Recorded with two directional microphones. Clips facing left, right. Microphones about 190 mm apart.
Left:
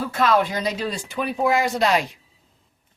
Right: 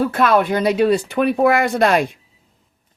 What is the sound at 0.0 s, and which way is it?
Speech, 60° right (ahead or behind).